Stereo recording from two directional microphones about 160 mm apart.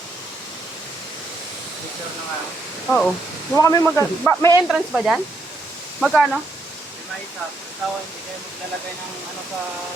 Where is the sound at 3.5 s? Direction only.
20° left (ahead or behind).